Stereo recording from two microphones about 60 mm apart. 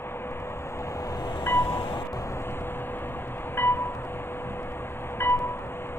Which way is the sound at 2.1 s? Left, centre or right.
Left.